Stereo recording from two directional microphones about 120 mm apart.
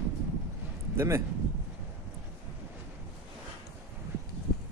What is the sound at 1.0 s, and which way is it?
Speech, 25° right (ahead or behind).